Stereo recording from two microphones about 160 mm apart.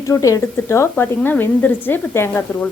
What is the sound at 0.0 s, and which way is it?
A woman's voice, 20° left (ahead or behind).